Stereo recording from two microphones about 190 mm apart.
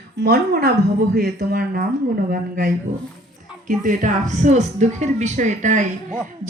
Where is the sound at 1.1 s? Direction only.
60° right (ahead or behind).